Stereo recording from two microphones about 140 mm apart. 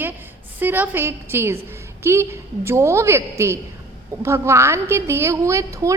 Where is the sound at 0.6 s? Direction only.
15° right (ahead or behind).